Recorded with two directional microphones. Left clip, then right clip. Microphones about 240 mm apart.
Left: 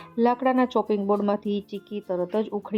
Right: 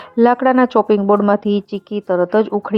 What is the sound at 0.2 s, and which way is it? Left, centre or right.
Speech, right.